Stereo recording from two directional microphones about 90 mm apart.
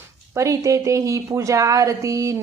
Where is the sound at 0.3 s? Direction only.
35° right (ahead or behind).